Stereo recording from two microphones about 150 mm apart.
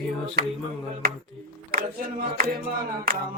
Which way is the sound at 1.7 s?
80° right.